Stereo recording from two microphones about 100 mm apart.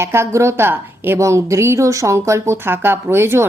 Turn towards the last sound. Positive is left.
turn(degrees=-25)  # may be behind; listen again after turning